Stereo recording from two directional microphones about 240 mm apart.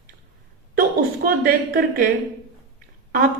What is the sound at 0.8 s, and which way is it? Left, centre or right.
A woman's voice, right.